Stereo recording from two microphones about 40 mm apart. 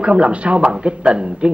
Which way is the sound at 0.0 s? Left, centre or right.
Right.